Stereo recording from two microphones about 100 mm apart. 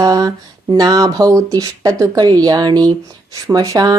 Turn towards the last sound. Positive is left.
turn(degrees=-40)  # may be behind; listen again after turning